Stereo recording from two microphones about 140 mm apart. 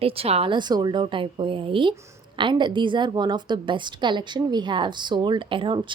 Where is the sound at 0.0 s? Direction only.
45° right (ahead or behind).